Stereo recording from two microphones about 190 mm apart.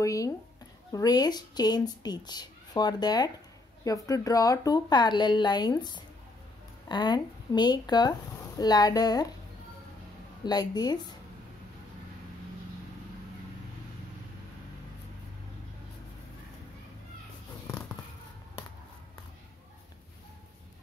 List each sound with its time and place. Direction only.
0.0 s speech: 15° left (ahead or behind)
10.4 s speech: 20° left (ahead or behind)